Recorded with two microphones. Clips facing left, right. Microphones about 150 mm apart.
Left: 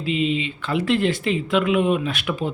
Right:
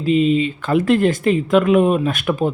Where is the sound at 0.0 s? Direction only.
40° right (ahead or behind).